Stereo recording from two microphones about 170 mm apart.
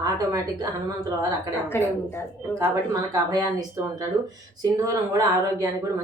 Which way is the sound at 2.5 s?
20° right (ahead or behind).